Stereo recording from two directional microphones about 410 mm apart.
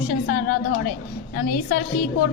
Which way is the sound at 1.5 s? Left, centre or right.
Left.